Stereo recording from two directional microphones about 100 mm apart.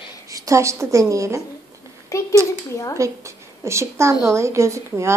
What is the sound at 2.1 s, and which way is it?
Speech, 30° left (ahead or behind).